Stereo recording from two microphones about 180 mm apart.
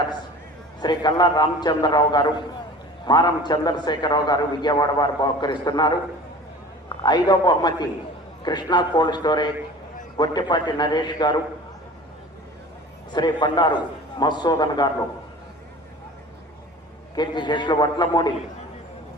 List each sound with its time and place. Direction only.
0.8 s a man's voice: 25° left (ahead or behind)
13.1 s a man's voice: 25° left (ahead or behind)
17.2 s a man's voice: 25° left (ahead or behind)